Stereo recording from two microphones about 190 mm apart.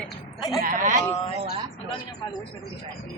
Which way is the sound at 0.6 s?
45° right (ahead or behind).